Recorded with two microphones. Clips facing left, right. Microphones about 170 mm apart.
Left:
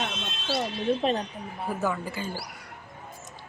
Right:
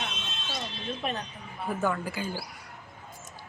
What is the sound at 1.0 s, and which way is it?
Speech, 30° left (ahead or behind).